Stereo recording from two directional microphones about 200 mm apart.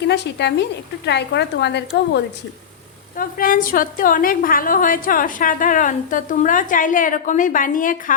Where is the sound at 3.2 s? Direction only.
45° left (ahead or behind).